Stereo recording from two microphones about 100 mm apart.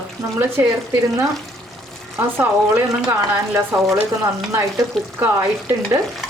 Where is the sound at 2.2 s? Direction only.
25° right (ahead or behind).